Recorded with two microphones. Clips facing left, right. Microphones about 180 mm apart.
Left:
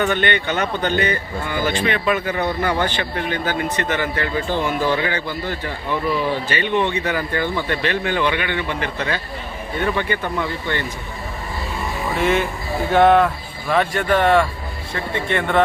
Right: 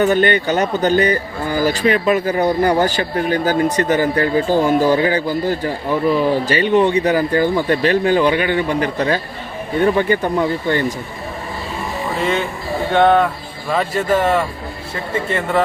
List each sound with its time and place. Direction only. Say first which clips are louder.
0.0 s a man's voice: right 5 dB; 40° right (ahead or behind)
12.1 s speech: left 1 dB; centre (ahead or behind)